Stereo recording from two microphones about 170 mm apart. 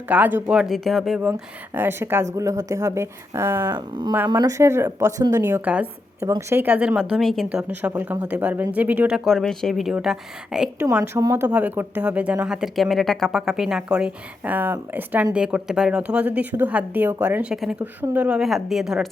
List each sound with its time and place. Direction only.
0.1 s speech: 10° right (ahead or behind)
1.3 s speech: 15° right (ahead or behind)
3.8 s speech: 25° right (ahead or behind); by 7.6 s centre (ahead or behind)
7.7 s speech: 10° right (ahead or behind)
11.2 s speech: 15° right (ahead or behind)